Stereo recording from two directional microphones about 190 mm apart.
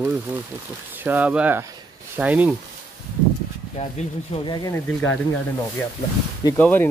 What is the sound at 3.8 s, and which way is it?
Speech, 30° left (ahead or behind).